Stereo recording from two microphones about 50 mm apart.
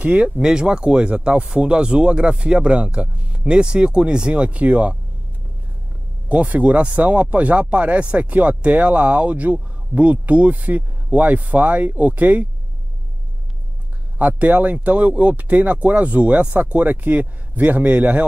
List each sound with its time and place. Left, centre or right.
0.0 s speech: right
0.4 s speech: centre; by 4.9 s right
6.2 s speech: right
14.1 s speech: right